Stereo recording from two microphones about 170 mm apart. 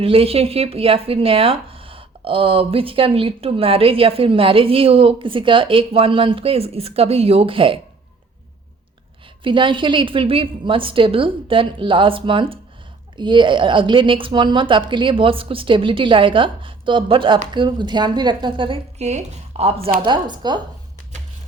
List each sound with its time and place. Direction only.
0.0 s speech: 35° right (ahead or behind)
9.4 s a woman's voice: 30° right (ahead or behind)
20.0 s a woman's voice: 25° right (ahead or behind)